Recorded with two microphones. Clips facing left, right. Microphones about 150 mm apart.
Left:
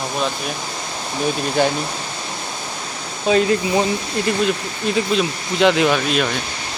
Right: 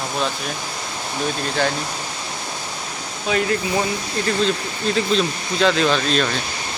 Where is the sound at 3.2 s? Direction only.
25° left (ahead or behind).